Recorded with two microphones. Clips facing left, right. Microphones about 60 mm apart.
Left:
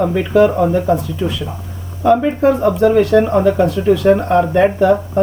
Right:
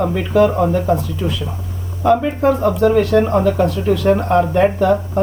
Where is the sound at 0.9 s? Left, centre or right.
Left.